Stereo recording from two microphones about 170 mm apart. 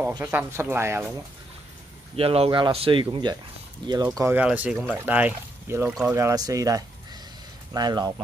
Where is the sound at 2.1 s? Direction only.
35° right (ahead or behind).